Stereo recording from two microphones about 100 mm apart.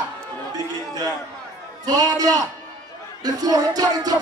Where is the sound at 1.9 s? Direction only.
40° right (ahead or behind).